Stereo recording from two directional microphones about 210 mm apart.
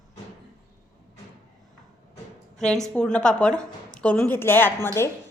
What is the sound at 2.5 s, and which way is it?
A woman's voice, centre (ahead or behind).